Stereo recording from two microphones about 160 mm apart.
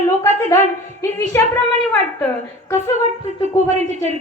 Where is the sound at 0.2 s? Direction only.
20° left (ahead or behind).